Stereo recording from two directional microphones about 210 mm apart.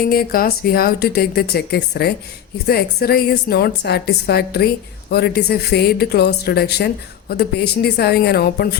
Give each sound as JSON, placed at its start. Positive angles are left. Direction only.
{"t": 0.1, "sound": "speech", "side_deg": 45}